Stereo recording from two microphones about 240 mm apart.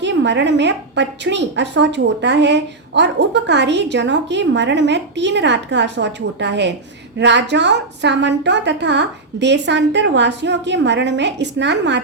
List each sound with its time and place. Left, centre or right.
0.0 s a woman's voice: right